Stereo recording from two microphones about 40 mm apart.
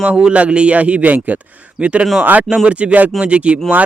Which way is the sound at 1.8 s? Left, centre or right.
Right.